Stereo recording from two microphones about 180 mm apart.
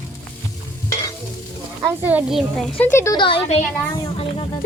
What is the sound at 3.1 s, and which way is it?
Speech, 30° left (ahead or behind).